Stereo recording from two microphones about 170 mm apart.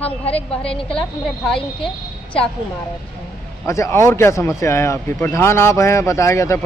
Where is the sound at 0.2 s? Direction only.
35° left (ahead or behind).